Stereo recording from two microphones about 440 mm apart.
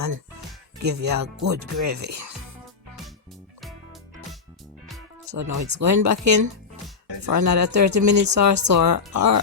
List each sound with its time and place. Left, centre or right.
0.8 s speech: right
5.3 s speech: right